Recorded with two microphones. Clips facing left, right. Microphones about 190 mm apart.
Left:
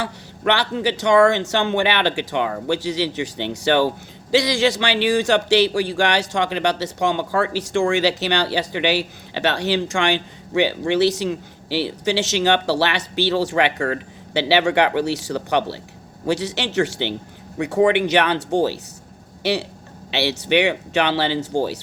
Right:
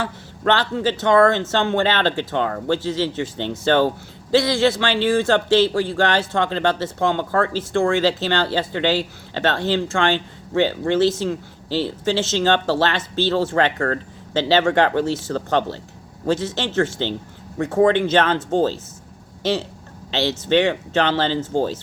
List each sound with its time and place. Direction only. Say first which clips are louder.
0.0 s speech: even; 15° left (ahead or behind)